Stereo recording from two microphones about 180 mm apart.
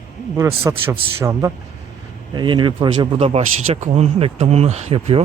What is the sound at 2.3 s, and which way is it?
Speech, 25° right (ahead or behind).